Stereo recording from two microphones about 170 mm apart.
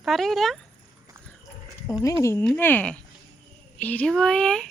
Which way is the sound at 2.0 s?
20° left (ahead or behind).